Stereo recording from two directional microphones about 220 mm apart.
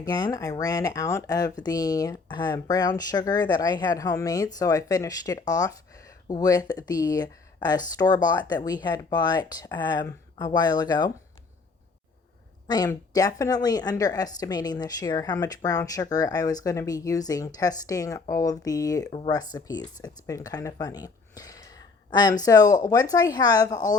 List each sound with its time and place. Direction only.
0.0 s a woman's voice: 15° left (ahead or behind)
12.6 s a woman's voice: 15° left (ahead or behind)